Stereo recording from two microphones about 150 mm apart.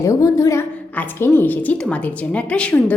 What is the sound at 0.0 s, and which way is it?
A woman's voice, 20° left (ahead or behind).